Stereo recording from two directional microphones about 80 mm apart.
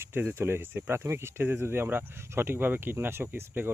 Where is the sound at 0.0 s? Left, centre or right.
Right.